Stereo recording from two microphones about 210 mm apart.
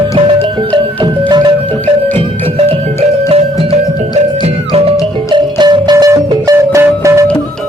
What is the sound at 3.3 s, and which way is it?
Music, 30° right (ahead or behind).